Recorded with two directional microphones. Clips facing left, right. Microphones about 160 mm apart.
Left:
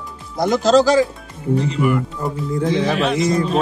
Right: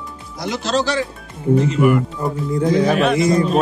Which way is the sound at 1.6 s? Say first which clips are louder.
Right 3 dB; 50° right (ahead or behind).